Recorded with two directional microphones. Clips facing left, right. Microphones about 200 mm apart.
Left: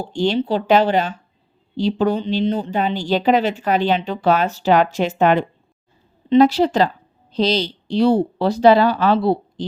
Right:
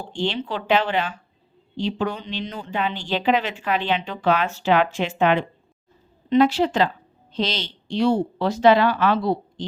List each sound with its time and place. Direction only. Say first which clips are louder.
0.0 s speech: left 7 dB; 40° left (ahead or behind)